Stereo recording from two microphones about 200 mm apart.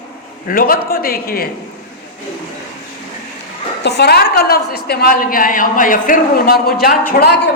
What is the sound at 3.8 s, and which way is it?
A woman's voice, 55° left (ahead or behind).